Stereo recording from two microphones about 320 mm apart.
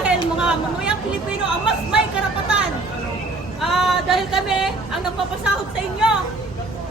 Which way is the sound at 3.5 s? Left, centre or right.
Centre.